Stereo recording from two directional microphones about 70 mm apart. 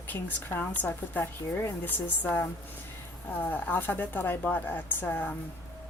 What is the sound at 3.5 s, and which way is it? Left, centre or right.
Speech, left.